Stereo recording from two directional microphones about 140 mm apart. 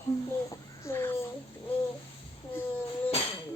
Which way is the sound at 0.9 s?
15° left (ahead or behind).